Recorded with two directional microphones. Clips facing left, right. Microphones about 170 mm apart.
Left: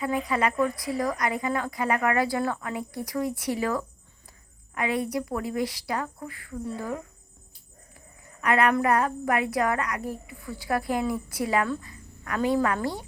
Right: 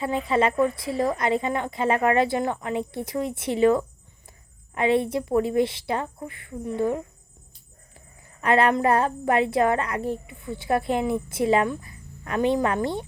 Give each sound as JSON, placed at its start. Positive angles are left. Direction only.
{"t": 0.0, "sound": "a woman's voice", "side_deg": -25}
{"t": 8.4, "sound": "a woman's voice", "side_deg": -30}